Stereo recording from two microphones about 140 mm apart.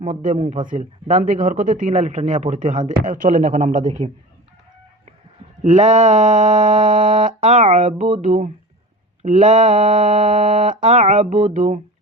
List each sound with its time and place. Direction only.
0.2 s speech: 65° right (ahead or behind)
5.6 s speech: 55° right (ahead or behind)
10.1 s music: 40° right (ahead or behind)
10.8 s speech: 60° right (ahead or behind)